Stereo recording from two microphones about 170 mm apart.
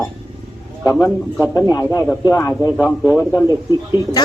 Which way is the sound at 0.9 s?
20° left (ahead or behind).